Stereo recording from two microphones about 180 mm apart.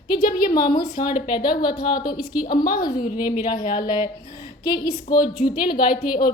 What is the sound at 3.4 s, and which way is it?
A woman's voice, 25° left (ahead or behind).